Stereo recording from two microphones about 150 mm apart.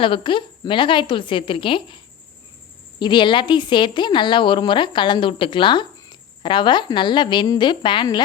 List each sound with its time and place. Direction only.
0.0 s a woman's voice: 35° left (ahead or behind)
3.0 s a woman's voice: 30° left (ahead or behind)